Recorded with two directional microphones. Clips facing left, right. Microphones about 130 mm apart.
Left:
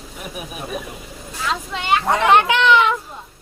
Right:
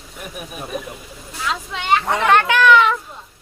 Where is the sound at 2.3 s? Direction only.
20° left (ahead or behind).